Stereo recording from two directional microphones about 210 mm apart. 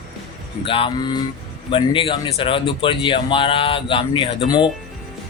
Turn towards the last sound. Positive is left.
turn(degrees=20)  # may be behind; listen again after turning